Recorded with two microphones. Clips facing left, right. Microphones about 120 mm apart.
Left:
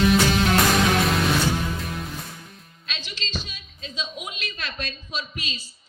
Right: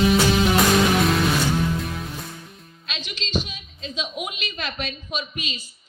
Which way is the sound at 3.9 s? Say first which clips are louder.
Right 4 dB; 15° right (ahead or behind).